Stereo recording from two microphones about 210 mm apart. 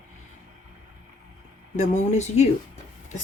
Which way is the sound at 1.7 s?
35° left (ahead or behind).